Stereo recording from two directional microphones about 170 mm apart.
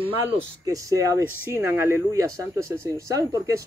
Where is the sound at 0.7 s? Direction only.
20° right (ahead or behind).